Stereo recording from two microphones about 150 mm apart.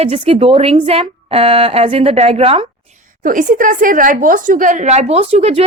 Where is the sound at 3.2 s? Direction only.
65° right (ahead or behind); by 5.6 s 45° right (ahead or behind).